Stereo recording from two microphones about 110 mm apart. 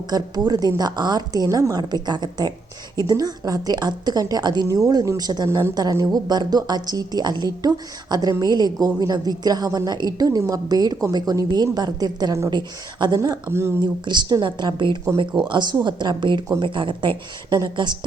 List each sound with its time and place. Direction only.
0.1 s a woman's voice: 40° right (ahead or behind)
13.1 s speech: 30° right (ahead or behind)
13.8 s speech: 45° right (ahead or behind)